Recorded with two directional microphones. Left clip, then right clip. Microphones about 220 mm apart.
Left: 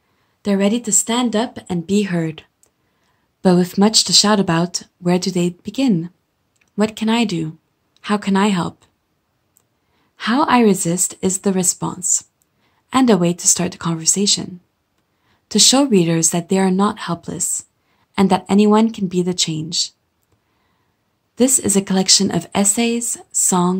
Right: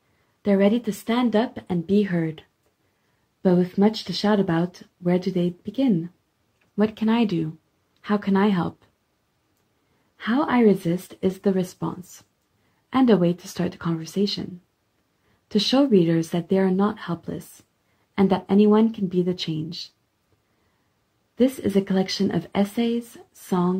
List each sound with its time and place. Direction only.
0.4 s speech: 5° left (ahead or behind)
3.4 s speech: 20° left (ahead or behind)
6.8 s speech: 5° left (ahead or behind)
10.1 s speech: 15° left (ahead or behind)
21.4 s speech: 15° left (ahead or behind)